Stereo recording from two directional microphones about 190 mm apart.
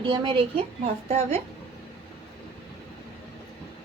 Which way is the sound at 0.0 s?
25° right (ahead or behind).